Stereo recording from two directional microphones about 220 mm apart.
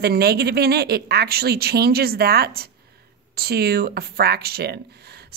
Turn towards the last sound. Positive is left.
turn(degrees=-45)  # may be behind; listen again after turning